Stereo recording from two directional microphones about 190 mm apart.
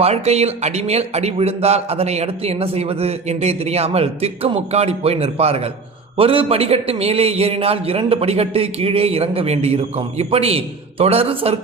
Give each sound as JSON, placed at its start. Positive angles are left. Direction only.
{"t": 0.0, "sound": "speech", "side_deg": -35}